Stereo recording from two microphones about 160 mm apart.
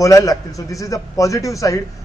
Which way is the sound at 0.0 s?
20° left (ahead or behind).